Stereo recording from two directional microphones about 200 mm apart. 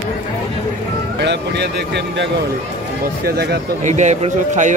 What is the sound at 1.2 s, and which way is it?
Speech, 60° right (ahead or behind).